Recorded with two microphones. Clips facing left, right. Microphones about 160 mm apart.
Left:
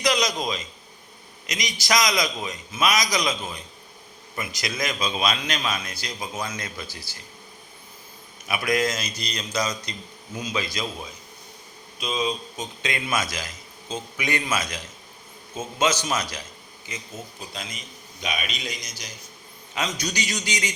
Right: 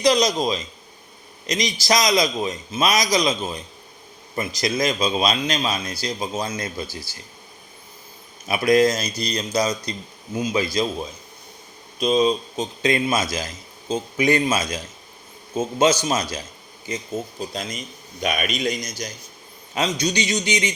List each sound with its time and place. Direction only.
0.0 s a man's voice: 30° right (ahead or behind)
4.6 s a man's voice: 30° right (ahead or behind)
8.4 s a man's voice: 30° right (ahead or behind)
11.9 s a man's voice: 35° right (ahead or behind)
17.5 s a man's voice: 40° right (ahead or behind)
18.2 s a man's voice: 50° right (ahead or behind)
19.7 s a man's voice: 30° right (ahead or behind)